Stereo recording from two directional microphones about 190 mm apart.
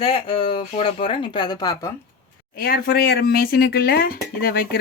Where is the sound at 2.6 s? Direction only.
50° left (ahead or behind).